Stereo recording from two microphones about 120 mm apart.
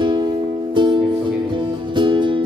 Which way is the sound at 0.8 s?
40° right (ahead or behind).